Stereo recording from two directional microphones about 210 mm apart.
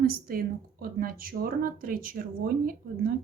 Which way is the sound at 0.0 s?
45° right (ahead or behind).